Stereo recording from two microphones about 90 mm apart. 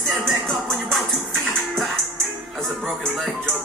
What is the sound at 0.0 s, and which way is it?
Music, centre (ahead or behind).